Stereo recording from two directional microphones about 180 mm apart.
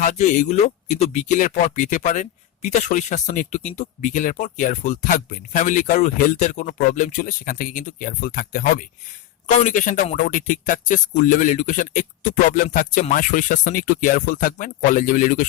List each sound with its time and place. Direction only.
0.0 s speech: 45° left (ahead or behind)